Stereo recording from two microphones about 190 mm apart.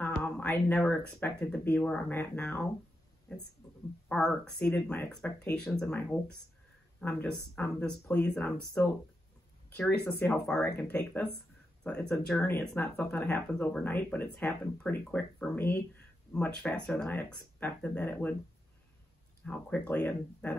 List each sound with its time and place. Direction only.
0.0 s speech: 10° left (ahead or behind)
19.4 s speech: 10° left (ahead or behind)